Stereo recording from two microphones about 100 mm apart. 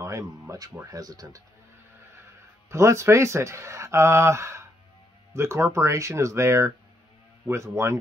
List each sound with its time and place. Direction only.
0.0 s speech: 35° right (ahead or behind)
2.7 s speech: 30° right (ahead or behind)